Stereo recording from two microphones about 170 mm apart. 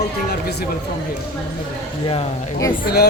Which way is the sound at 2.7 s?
65° left (ahead or behind).